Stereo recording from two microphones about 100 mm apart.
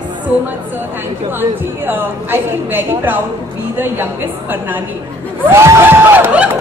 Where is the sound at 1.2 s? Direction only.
20° right (ahead or behind).